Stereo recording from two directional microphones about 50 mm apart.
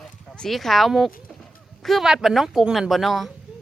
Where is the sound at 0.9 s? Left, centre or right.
Centre.